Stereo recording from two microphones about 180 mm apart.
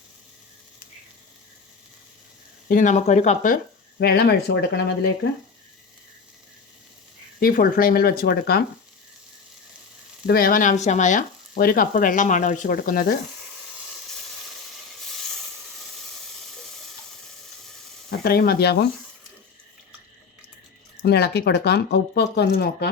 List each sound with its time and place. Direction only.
2.6 s sizzle: 45° left (ahead or behind); by 4.8 s 65° left (ahead or behind)
7.3 s speech: 55° left (ahead or behind)
10.2 s sizzle: 55° left (ahead or behind)
18.2 s speech: 60° left (ahead or behind)
21.0 s speech: 65° left (ahead or behind)